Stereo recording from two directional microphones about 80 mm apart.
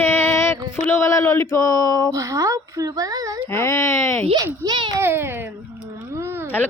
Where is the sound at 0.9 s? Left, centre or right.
Left.